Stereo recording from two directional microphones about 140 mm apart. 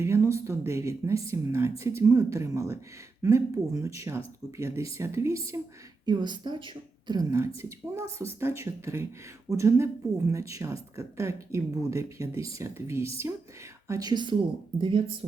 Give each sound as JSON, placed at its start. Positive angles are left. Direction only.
{"t": 0.0, "sound": "speech", "side_deg": -20}
{"t": 6.1, "sound": "speech", "side_deg": -30}